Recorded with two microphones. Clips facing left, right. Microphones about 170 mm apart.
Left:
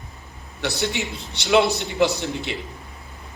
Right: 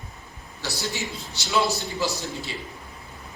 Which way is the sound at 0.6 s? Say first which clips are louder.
Left 6 dB; 65° left (ahead or behind).